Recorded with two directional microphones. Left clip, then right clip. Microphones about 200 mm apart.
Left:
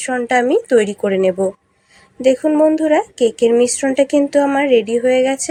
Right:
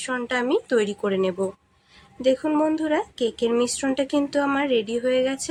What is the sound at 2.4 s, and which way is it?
A woman's voice, 15° left (ahead or behind).